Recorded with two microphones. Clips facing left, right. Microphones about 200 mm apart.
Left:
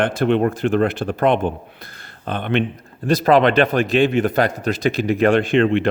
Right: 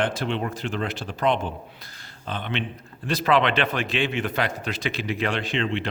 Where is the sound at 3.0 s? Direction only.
40° left (ahead or behind).